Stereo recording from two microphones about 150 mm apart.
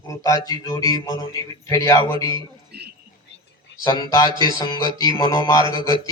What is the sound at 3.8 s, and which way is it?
A man's voice, 25° left (ahead or behind).